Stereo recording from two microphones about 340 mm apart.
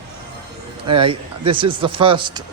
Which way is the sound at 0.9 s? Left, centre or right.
Centre.